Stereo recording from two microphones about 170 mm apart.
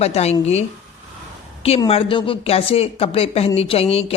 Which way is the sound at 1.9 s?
35° left (ahead or behind).